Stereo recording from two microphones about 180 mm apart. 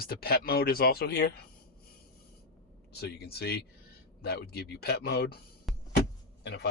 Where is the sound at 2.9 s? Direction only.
60° left (ahead or behind).